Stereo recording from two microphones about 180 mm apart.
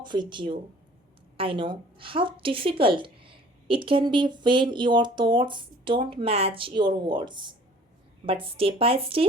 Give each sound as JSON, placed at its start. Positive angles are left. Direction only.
{"t": 0.0, "sound": "a woman's voice", "side_deg": -25}